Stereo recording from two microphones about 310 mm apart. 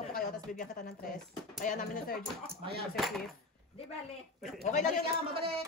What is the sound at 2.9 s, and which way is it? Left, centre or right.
Speech, centre.